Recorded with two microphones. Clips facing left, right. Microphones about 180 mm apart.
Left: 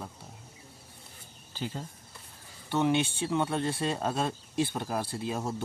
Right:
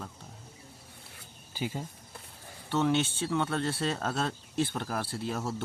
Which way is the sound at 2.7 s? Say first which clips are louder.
Left 1 dB; 15° left (ahead or behind).